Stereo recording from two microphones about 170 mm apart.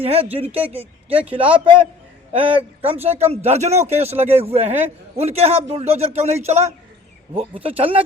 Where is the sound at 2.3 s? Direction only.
35° right (ahead or behind).